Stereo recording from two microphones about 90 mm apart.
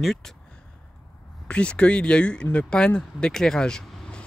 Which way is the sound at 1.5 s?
15° left (ahead or behind).